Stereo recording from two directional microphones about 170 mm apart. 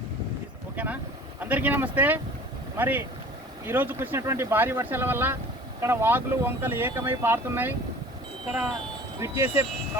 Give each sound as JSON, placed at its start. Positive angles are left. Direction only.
{"t": 1.4, "sound": "speech", "side_deg": -10}
{"t": 8.5, "sound": "speech", "side_deg": 0}
{"t": 9.2, "sound": "speech", "side_deg": -10}